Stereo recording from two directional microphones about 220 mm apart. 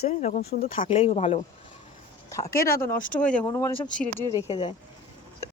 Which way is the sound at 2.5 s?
40° left (ahead or behind).